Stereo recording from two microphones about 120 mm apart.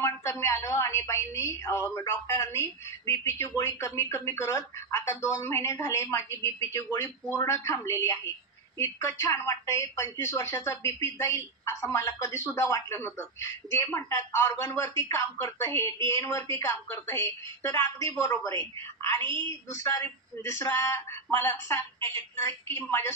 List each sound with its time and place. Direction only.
0.0 s speech: 25° left (ahead or behind)